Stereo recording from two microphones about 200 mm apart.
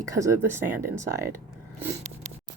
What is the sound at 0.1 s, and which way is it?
Speech, 15° right (ahead or behind).